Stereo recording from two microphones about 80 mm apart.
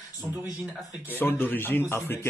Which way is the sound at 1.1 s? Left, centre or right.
Left.